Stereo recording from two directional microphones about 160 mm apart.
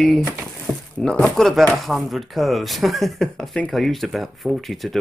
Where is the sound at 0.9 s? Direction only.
5° left (ahead or behind).